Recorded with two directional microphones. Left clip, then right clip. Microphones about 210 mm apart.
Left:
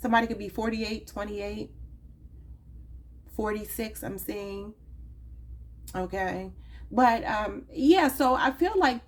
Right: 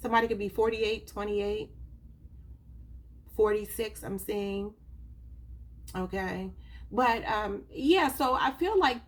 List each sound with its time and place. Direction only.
0.0 s a woman's voice: 30° left (ahead or behind)
3.3 s a woman's voice: 30° left (ahead or behind)
5.9 s a woman's voice: 30° left (ahead or behind)